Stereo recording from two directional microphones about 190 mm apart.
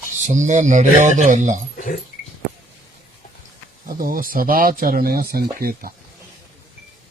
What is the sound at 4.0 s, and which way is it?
Speech, 45° right (ahead or behind).